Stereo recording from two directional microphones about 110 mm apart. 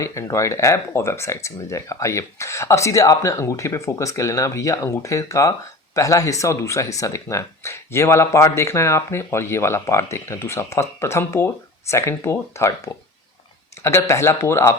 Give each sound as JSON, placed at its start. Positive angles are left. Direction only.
{"t": 0.0, "sound": "speech", "side_deg": 30}